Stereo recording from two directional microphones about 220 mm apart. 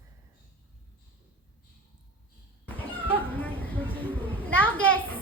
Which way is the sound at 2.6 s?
10° left (ahead or behind).